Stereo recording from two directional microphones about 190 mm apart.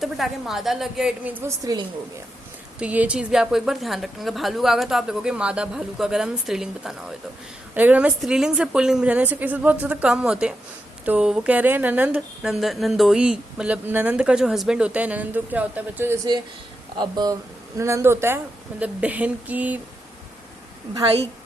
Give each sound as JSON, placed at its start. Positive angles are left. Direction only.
{"t": 0.0, "sound": "a woman's voice", "side_deg": 0}